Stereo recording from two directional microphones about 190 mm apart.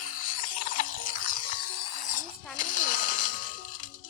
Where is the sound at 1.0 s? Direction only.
45° left (ahead or behind).